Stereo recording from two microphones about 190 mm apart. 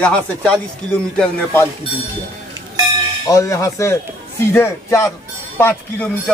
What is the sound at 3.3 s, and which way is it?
Speech, 15° left (ahead or behind).